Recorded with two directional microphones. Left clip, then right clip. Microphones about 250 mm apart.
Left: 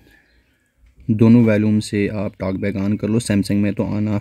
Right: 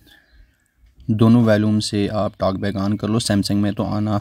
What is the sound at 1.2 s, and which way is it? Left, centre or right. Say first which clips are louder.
Speech: left 1 dB; centre.